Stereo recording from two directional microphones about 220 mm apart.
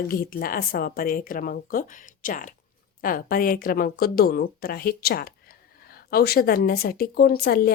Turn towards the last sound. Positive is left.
turn(degrees=45)  # may be behind; listen again after turning